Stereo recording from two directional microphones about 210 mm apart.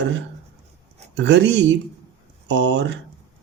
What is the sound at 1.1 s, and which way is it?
Speech, 55° right (ahead or behind).